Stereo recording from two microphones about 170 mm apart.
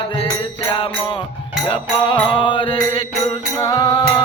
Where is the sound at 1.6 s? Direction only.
30° left (ahead or behind).